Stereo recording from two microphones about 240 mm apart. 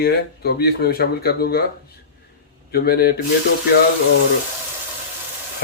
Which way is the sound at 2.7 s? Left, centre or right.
Left.